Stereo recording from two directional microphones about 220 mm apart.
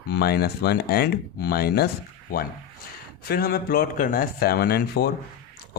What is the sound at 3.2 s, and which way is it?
A man's voice, 45° left (ahead or behind).